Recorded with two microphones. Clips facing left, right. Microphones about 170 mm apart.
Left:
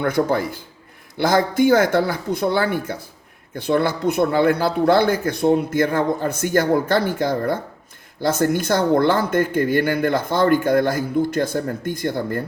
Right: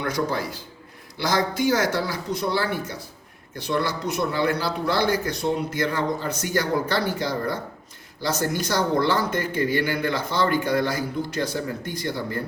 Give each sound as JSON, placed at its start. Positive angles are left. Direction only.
{"t": 0.0, "sound": "speech", "side_deg": 55}